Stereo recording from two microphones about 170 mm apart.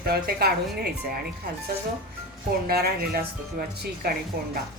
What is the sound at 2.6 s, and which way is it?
Speech, 65° right (ahead or behind).